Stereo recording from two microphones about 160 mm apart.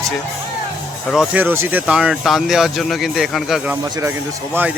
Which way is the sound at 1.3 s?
10° right (ahead or behind).